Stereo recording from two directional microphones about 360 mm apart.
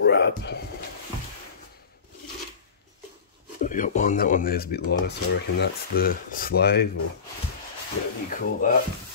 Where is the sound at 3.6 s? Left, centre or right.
Left.